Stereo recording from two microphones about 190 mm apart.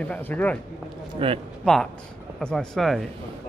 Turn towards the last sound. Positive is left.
turn(degrees=0)  # may be behind; listen again after turning